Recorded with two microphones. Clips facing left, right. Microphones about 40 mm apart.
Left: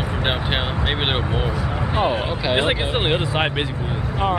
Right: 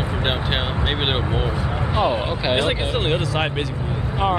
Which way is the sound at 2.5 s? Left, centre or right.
Left.